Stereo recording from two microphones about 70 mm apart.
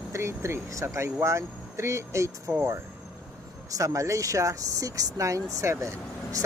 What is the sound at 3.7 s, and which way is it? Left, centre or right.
Speech, right.